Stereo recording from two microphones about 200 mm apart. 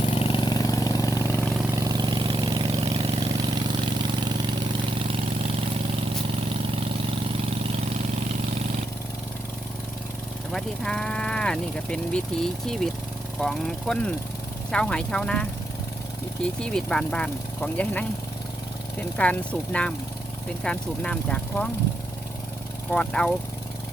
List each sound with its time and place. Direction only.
0.0 s vehicle: 25° left (ahead or behind)
1.7 s vehicle: 20° right (ahead or behind)
10.5 s speech: 5° left (ahead or behind)
16.6 s speech: 5° left (ahead or behind)
19.1 s speech: 5° left (ahead or behind)
22.9 s speech: 5° left (ahead or behind)